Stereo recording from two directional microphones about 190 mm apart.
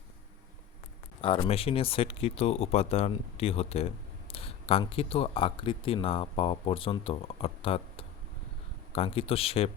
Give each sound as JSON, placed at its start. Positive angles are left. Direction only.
{"t": 1.2, "sound": "speech", "side_deg": 25}